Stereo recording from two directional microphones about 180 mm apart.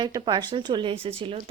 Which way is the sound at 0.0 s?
25° right (ahead or behind).